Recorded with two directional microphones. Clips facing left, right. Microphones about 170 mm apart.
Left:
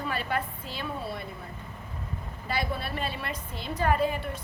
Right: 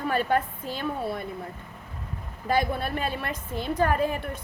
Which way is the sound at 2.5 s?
50° right (ahead or behind).